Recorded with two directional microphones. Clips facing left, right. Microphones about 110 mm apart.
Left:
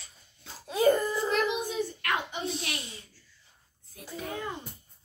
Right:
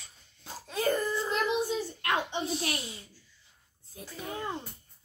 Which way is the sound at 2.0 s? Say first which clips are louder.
Right 1 dB; 30° right (ahead or behind).